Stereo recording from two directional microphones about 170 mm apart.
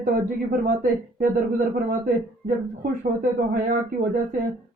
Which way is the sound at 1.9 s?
60° right (ahead or behind).